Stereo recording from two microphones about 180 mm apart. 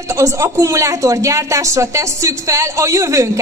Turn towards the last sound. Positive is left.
turn(degrees=-15)  # may be behind; listen again after turning